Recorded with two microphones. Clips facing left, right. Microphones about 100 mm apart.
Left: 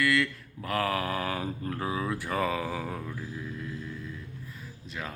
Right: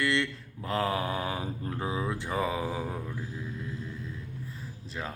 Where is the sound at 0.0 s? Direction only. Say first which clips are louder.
Left 2 dB; 25° right (ahead or behind).